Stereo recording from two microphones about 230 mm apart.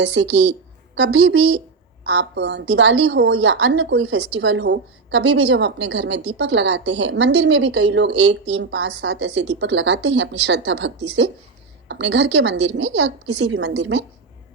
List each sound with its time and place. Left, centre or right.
0.0 s speech: right